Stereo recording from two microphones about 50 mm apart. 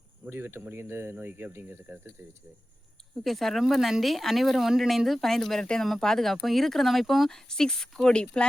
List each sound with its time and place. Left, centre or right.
0.3 s speech: right
3.2 s speech: centre